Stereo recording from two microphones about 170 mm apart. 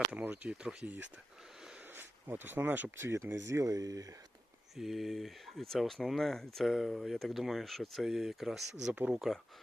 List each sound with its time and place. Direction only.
0.1 s speech: 10° right (ahead or behind)
4.8 s speech: centre (ahead or behind)